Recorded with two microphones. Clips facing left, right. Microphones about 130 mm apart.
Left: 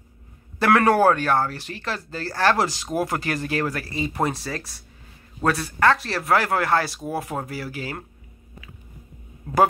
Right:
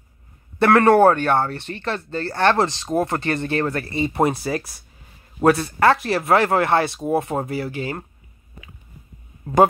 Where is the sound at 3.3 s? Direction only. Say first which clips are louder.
Right 3 dB; 5° left (ahead or behind).